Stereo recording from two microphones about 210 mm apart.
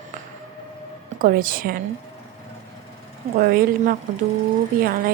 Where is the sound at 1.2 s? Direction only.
40° right (ahead or behind).